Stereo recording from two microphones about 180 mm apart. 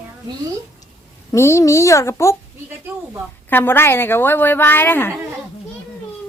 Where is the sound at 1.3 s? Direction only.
15° left (ahead or behind).